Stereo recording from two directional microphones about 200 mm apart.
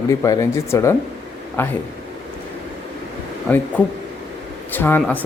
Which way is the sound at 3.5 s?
10° left (ahead or behind).